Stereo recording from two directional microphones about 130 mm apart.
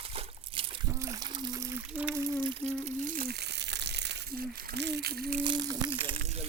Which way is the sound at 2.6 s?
60° right (ahead or behind).